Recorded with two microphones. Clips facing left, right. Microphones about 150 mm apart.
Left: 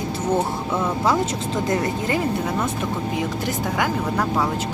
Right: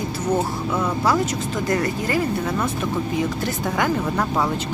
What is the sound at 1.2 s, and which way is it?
Speech, 25° left (ahead or behind).